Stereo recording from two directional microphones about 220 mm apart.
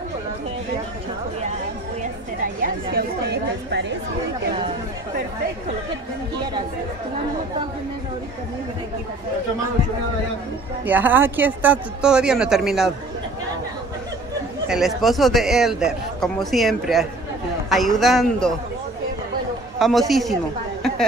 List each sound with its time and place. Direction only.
2.4 s speech: 40° right (ahead or behind)
10.9 s a man's voice: 10° right (ahead or behind)
14.7 s a man's voice: centre (ahead or behind)
19.8 s a man's voice: centre (ahead or behind)